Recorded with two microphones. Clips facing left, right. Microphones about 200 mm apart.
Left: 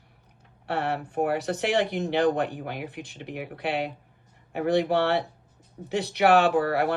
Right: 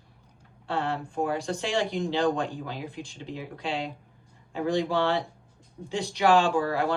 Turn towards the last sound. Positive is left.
turn(degrees=65)  # may be behind; listen again after turning